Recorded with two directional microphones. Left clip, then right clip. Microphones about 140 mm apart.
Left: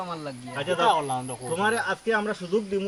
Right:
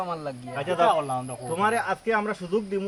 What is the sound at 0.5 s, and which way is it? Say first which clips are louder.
Speech: left 1 dB; 10° left (ahead or behind).